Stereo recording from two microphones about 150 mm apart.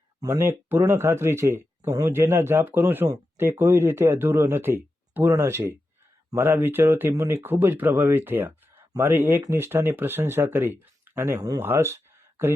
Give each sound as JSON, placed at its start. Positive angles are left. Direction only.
{"t": 0.2, "sound": "speech", "side_deg": -20}